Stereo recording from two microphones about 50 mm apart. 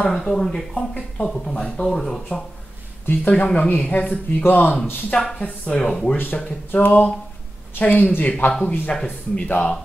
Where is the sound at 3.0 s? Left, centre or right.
Left.